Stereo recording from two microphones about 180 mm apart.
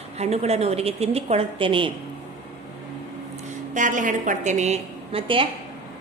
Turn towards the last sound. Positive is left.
turn(degrees=-30)  # may be behind; listen again after turning